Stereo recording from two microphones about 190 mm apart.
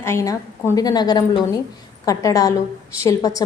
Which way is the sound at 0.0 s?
15° left (ahead or behind).